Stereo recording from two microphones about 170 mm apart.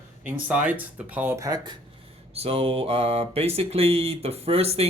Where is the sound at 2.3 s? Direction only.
35° right (ahead or behind).